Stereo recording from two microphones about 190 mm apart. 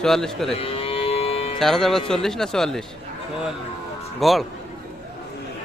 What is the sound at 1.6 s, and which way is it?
Speech, centre (ahead or behind).